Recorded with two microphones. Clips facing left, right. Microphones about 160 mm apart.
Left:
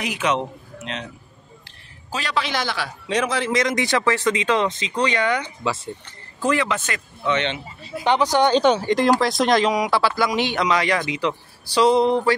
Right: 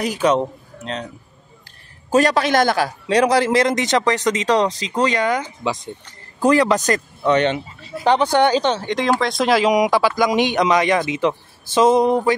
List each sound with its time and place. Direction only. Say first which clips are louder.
0.0 s a man's voice: right 5 dB; 35° right (ahead or behind)
2.0 s a man's voice: right 10 dB; 45° right (ahead or behind)
3.8 s speech: right 2 dB; 20° right (ahead or behind)
4.5 s speech: right 3 dB; 35° right (ahead or behind)
8.6 s speech: left 2 dB; 10° left (ahead or behind)
9.7 s speech: right 4 dB; 15° right (ahead or behind)